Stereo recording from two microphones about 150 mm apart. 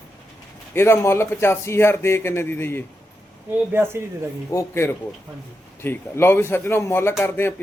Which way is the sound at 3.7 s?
15° right (ahead or behind).